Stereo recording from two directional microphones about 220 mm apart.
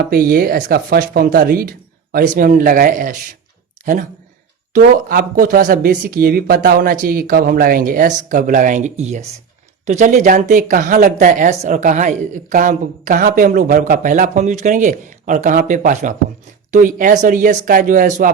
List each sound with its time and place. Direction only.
0.1 s speech: 40° right (ahead or behind)
4.7 s speech: 40° right (ahead or behind)